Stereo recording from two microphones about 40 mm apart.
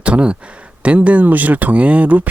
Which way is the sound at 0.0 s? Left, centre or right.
Right.